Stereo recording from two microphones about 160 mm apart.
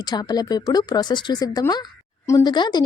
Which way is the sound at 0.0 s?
25° left (ahead or behind).